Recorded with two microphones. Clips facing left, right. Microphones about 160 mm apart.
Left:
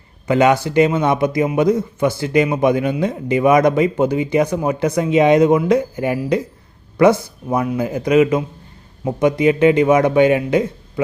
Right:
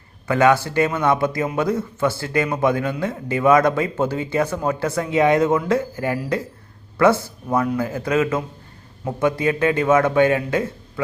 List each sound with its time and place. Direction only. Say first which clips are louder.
0.3 s a man's voice: left 2 dB; 20° left (ahead or behind)